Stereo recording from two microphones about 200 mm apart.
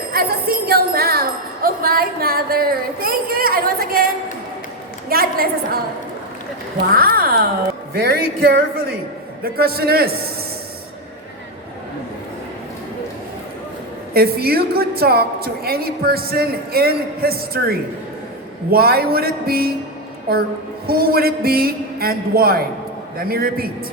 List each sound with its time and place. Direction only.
0.1 s wind chime: 50° right (ahead or behind)
5.0 s a woman's voice: 50° right (ahead or behind)
6.9 s a woman's voice: 45° right (ahead or behind)
14.1 s a woman's voice: 50° right (ahead or behind)